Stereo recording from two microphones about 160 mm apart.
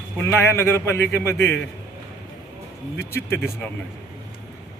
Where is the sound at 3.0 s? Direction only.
15° left (ahead or behind).